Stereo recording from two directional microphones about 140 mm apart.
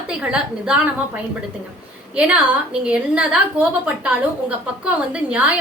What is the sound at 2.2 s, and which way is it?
A woman's voice, 10° right (ahead or behind).